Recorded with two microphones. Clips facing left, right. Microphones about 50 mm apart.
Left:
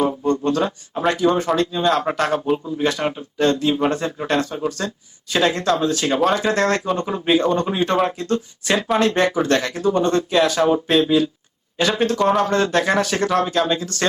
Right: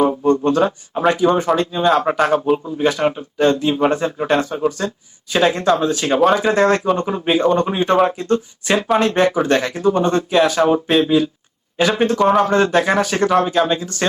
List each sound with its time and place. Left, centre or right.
0.0 s speech: centre
11.8 s speech: centre